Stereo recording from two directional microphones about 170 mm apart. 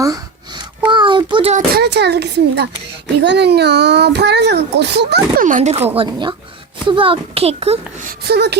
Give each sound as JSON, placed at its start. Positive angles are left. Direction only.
{"t": 0.0, "sound": "a sound", "side_deg": -20}
{"t": 1.5, "sound": "a child's voice", "side_deg": -70}
{"t": 5.4, "sound": "speech", "side_deg": -50}
{"t": 6.0, "sound": "a child's voice", "side_deg": -25}
{"t": 8.0, "sound": "speech", "side_deg": -70}